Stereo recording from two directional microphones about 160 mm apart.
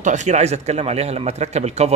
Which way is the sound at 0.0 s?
50° right (ahead or behind).